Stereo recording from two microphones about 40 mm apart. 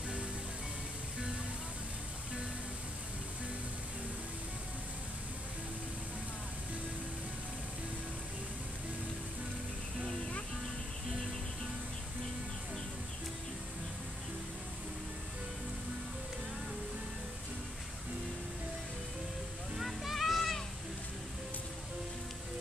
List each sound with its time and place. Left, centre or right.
19.8 s music: centre